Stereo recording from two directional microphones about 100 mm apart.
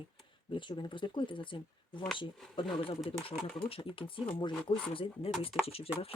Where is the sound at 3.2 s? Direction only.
70° left (ahead or behind).